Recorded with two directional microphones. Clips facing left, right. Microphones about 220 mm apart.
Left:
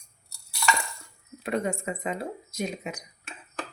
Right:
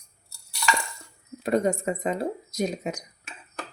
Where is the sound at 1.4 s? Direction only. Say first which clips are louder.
Right 5 dB; 40° right (ahead or behind).